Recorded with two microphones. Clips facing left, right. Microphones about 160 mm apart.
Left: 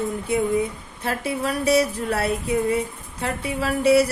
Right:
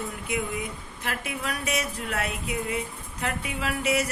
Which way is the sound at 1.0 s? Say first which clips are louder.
Left 8 dB; 35° left (ahead or behind).